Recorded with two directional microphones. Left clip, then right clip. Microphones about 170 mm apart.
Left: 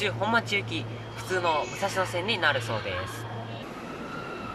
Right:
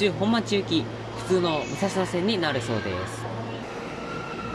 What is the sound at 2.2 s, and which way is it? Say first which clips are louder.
Speech: left 3 dB; 30° right (ahead or behind).